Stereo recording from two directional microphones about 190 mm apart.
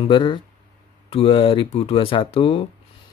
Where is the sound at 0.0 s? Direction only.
25° left (ahead or behind).